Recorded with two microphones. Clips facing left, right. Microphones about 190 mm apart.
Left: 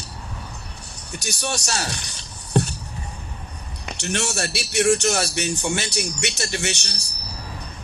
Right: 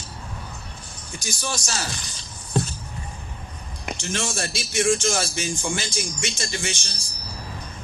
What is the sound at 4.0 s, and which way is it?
Speech, 70° left (ahead or behind).